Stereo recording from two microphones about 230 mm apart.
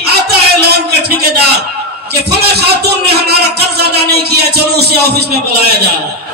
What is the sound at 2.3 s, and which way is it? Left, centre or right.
A man's voice, right.